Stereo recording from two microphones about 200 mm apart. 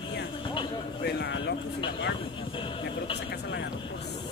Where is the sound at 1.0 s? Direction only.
55° left (ahead or behind).